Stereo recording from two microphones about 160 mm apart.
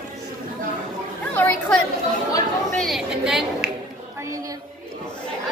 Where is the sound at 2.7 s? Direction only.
Centre (ahead or behind).